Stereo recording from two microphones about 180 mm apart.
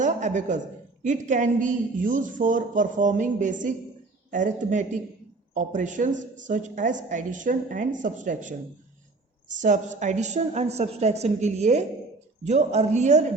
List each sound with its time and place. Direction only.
0.0 s a woman's voice: 40° right (ahead or behind)